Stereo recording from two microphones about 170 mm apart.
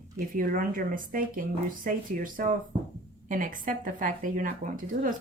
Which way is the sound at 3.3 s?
55° right (ahead or behind).